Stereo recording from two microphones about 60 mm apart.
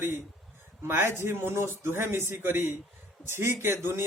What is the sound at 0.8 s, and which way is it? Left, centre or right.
A man's voice, right.